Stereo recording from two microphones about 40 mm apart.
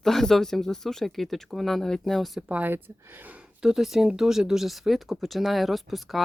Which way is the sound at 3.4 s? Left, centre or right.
Right.